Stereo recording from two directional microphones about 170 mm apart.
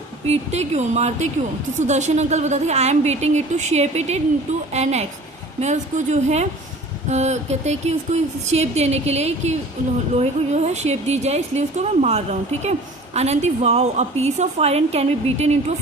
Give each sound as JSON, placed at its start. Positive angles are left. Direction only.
{"t": 0.3, "sound": "a woman's voice", "side_deg": -40}